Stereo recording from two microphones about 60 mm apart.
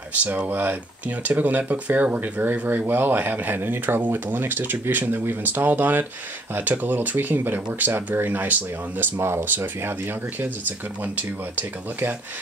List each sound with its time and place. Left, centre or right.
0.1 s speech: right
11.0 s speech: right